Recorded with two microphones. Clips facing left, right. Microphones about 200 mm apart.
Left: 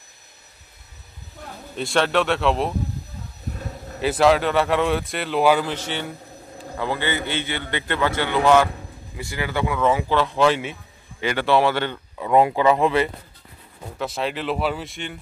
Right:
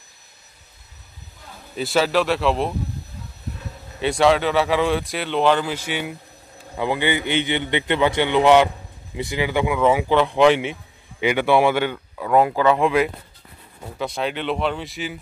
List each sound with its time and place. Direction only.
1.8 s speech: centre (ahead or behind)
4.0 s speech: centre (ahead or behind)
5.7 s a man's voice: 10° right (ahead or behind)
12.2 s speech: 5° left (ahead or behind)